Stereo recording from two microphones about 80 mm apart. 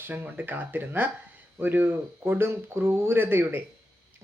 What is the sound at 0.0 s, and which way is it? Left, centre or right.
Speech, right.